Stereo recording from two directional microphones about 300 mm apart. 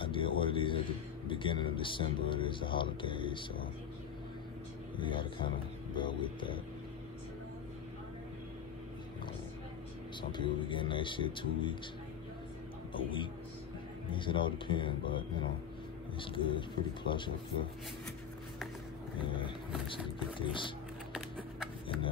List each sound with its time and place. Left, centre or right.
0.0 s a man's voice: centre
4.9 s speech: centre
10.3 s speech: centre
12.9 s speech: centre
19.1 s speech: centre
21.8 s a sound: centre